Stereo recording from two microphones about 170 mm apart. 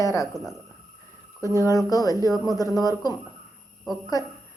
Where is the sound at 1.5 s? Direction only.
20° left (ahead or behind).